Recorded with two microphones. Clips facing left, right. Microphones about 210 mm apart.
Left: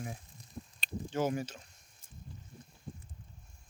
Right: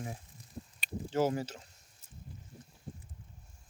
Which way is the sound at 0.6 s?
40° right (ahead or behind).